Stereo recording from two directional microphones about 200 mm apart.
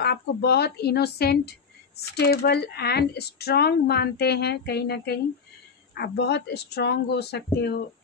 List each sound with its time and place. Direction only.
0.0 s speech: 55° left (ahead or behind)